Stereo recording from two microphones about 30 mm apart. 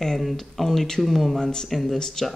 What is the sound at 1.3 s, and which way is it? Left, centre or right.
Speech, left.